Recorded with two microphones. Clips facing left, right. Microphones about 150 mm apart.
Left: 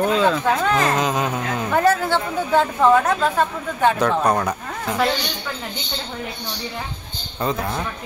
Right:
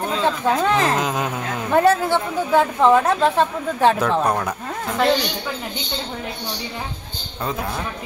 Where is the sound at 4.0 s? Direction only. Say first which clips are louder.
Left 1 dB; 5° right (ahead or behind).